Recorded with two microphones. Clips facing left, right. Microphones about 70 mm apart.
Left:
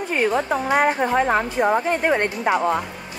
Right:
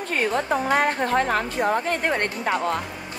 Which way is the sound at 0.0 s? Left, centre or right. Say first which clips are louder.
Left 3 dB; centre.